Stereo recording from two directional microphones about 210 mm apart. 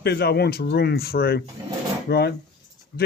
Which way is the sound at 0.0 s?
50° left (ahead or behind).